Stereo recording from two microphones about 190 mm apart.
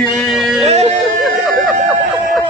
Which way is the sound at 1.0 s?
Centre (ahead or behind).